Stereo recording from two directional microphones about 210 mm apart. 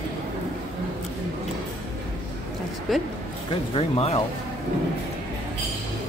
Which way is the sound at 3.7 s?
25° left (ahead or behind).